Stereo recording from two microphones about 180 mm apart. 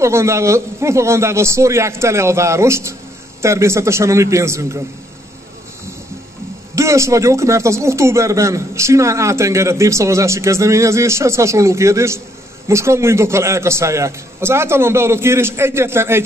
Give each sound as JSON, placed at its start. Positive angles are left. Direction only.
{"t": 0.0, "sound": "speech", "side_deg": -15}
{"t": 6.7, "sound": "speech", "side_deg": -15}